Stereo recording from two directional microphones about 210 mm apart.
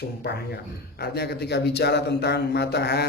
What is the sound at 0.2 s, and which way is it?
Speech, 50° left (ahead or behind).